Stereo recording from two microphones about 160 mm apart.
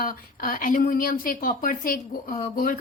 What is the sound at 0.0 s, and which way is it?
A woman's voice, 65° left (ahead or behind).